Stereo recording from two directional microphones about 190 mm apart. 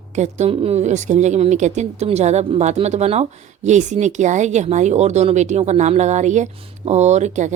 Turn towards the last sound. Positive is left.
turn(degrees=-40)  # may be behind; listen again after turning